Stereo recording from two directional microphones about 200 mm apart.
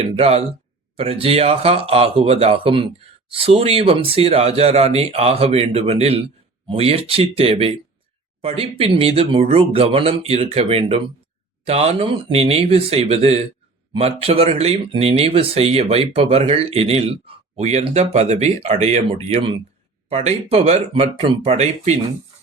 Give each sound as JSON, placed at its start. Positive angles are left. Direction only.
{"t": 0.2, "sound": "speech", "side_deg": -30}